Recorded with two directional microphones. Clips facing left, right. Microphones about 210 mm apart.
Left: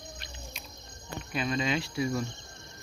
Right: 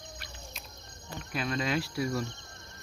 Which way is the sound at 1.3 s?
Centre (ahead or behind).